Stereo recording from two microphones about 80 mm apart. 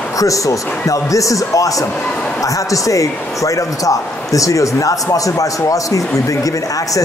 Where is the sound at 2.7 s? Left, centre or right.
Left.